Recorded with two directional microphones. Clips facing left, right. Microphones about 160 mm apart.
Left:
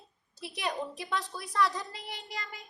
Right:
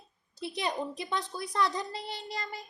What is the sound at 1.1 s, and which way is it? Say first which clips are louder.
A woman's voice: right 1 dB; 20° right (ahead or behind).